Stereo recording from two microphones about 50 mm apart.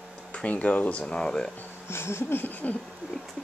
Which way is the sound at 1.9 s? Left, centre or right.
Left.